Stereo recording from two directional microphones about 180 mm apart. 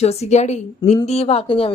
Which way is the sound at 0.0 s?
35° left (ahead or behind).